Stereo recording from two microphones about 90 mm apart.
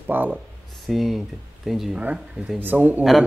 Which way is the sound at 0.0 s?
20° right (ahead or behind).